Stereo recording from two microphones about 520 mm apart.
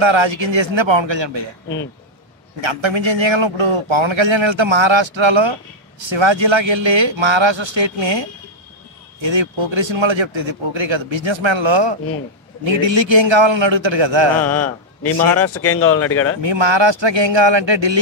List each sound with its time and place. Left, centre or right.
0.0 s a man's voice: right
2.6 s a man's voice: right
14.4 s a man's voice: left
16.3 s a man's voice: right